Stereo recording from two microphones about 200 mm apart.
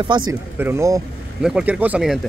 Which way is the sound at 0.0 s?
20° right (ahead or behind).